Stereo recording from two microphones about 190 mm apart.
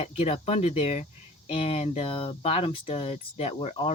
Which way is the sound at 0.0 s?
30° left (ahead or behind).